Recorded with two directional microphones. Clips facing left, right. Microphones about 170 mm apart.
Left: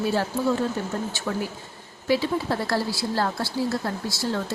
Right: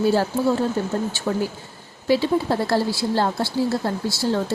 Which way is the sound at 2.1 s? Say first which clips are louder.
Right 4 dB; 30° right (ahead or behind).